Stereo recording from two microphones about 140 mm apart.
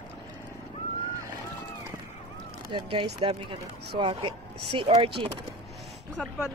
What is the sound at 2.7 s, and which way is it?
Speech, 35° right (ahead or behind).